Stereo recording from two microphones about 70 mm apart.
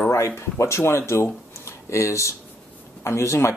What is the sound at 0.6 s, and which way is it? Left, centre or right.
Speech, left.